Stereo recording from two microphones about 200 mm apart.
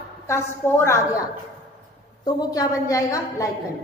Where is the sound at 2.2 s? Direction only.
20° left (ahead or behind).